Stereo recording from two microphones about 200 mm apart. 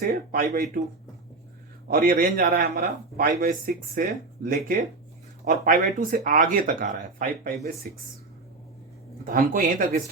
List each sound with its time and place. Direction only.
0.0 s speech: 45° right (ahead or behind)
1.9 s speech: 45° right (ahead or behind)
9.2 s speech: 40° right (ahead or behind)